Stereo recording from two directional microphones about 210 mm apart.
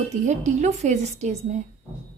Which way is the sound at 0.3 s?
35° right (ahead or behind).